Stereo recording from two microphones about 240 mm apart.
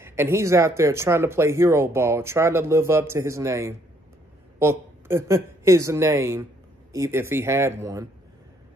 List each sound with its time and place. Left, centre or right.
0.0 s speech: centre